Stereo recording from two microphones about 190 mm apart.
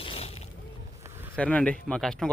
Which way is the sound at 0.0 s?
30° left (ahead or behind).